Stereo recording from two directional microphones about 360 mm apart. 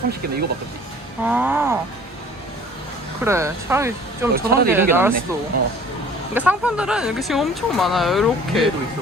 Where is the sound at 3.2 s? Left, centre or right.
Centre.